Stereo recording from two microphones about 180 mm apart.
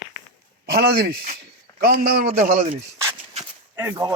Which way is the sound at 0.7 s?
60° right (ahead or behind).